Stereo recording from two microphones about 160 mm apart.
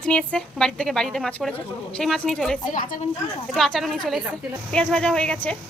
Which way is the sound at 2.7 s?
55° left (ahead or behind).